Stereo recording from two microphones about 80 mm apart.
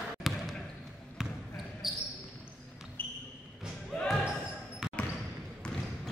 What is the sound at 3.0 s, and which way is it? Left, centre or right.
Basketball bounce, left.